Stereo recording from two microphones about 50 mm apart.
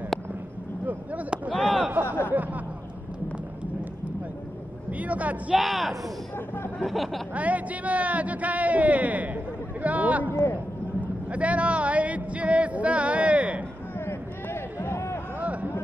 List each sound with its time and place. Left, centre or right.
0.8 s a sound: right
2.1 s speech: right
4.9 s speech: right
5.6 s speech: centre
7.3 s a man's voice: right
10.3 s a man's voice: left
11.3 s speech: right
13.9 s a sound: left
15.4 s a sound: right